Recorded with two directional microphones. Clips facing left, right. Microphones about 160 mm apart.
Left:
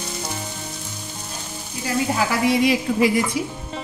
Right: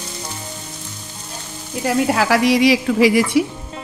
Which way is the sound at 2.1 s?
85° right.